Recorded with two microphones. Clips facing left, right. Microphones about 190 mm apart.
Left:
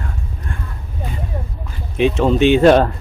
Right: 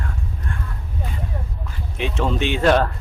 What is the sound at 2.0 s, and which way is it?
Speech, 20° left (ahead or behind).